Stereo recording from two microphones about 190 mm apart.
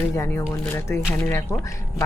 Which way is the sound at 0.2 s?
15° left (ahead or behind).